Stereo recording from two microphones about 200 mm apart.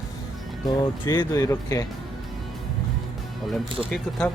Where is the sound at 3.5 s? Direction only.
Centre (ahead or behind).